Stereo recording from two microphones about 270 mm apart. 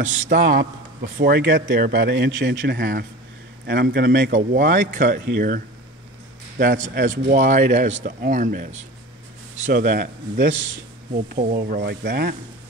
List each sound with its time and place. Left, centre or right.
0.2 s speech: right
6.6 s speech: right
9.7 s speech: right